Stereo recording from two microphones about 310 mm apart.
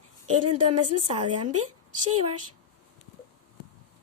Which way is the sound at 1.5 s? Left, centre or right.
Right.